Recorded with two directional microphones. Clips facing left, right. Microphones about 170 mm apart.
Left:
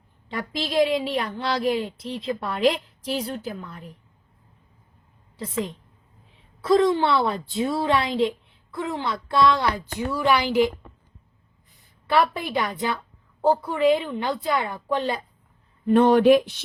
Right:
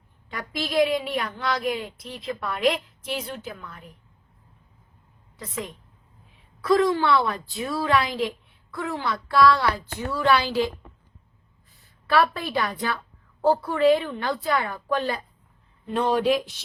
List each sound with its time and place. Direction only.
0.3 s a woman's voice: 25° left (ahead or behind)
5.4 s a woman's voice: 30° left (ahead or behind)
12.0 s a woman's voice: 20° left (ahead or behind)
15.9 s speech: 60° left (ahead or behind)